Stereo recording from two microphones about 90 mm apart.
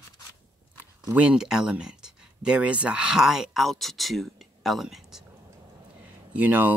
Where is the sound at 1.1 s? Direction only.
15° right (ahead or behind).